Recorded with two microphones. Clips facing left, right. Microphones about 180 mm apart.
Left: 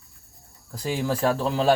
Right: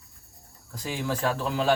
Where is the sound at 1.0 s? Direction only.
35° left (ahead or behind).